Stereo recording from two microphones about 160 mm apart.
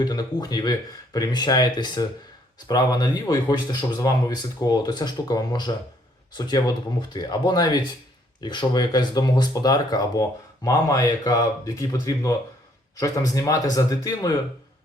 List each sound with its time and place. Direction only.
0.0 s speech: 25° left (ahead or behind)